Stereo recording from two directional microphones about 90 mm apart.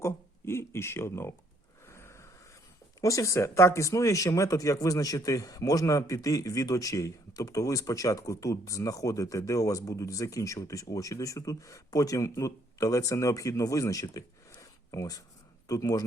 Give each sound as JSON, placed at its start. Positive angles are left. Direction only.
{"t": 0.0, "sound": "speech", "side_deg": 30}
{"t": 1.9, "sound": "a sound", "side_deg": 30}
{"t": 3.0, "sound": "speech", "side_deg": 35}